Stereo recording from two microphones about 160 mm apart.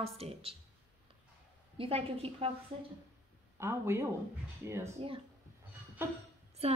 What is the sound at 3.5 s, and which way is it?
Speech, 15° right (ahead or behind).